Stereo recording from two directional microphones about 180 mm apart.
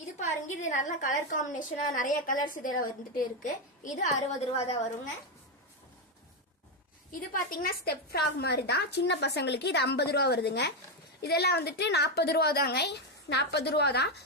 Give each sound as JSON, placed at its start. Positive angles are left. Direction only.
{"t": 0.2, "sound": "a woman's voice", "side_deg": 40}
{"t": 7.1, "sound": "a woman's voice", "side_deg": 55}